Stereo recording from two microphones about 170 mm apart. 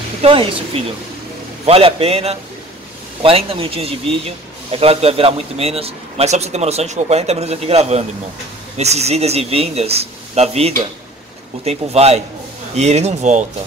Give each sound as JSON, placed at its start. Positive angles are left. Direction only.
{"t": 0.2, "sound": "a man's voice", "side_deg": -30}